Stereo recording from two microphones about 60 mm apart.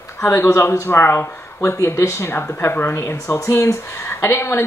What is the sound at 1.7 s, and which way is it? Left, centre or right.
Speech, left.